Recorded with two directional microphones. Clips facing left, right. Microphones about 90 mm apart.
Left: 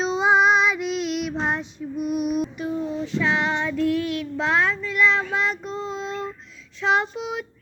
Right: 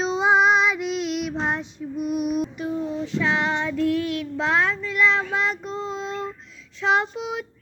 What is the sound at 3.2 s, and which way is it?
Child singing, 30° right (ahead or behind).